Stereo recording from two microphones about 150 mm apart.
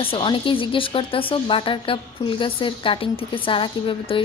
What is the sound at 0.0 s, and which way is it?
Speech, 35° left (ahead or behind).